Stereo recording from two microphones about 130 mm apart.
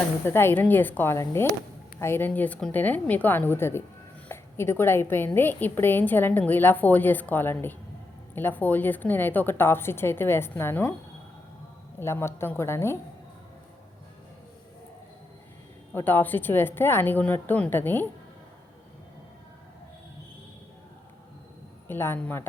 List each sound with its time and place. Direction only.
0.3 s a woman's voice: 20° left (ahead or behind)
11.9 s a woman's voice: 20° left (ahead or behind)
15.9 s a woman's voice: 15° left (ahead or behind)
21.8 s a woman's voice: 15° left (ahead or behind)